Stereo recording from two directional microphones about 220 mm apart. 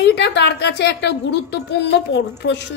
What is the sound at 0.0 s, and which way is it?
A woman's voice, 50° left (ahead or behind).